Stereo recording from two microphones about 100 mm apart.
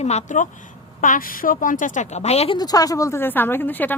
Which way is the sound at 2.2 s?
90° left.